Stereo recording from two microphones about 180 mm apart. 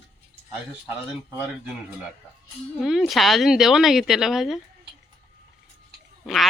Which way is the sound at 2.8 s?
Centre (ahead or behind).